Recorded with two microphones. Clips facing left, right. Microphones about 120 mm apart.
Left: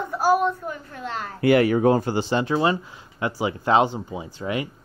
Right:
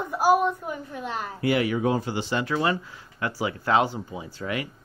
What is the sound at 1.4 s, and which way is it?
Speech, 50° left (ahead or behind).